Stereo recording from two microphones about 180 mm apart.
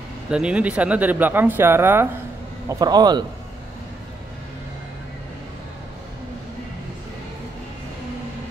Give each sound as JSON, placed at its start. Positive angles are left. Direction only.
{"t": 0.3, "sound": "a man's voice", "side_deg": -5}